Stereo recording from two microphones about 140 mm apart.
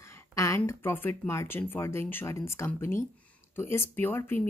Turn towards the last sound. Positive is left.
turn(degrees=15)  # may be behind; listen again after turning